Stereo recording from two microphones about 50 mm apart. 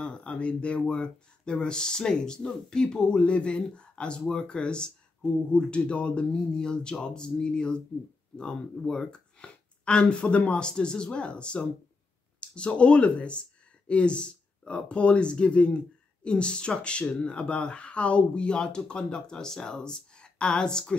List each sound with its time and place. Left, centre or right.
0.0 s speech: left